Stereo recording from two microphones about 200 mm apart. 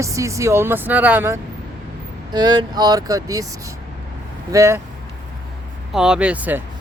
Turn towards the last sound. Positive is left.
turn(degrees=-10)  # may be behind; listen again after turning